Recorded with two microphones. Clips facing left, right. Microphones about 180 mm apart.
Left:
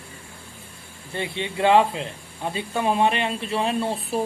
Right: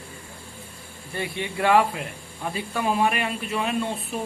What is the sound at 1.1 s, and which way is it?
A man's voice, 20° left (ahead or behind).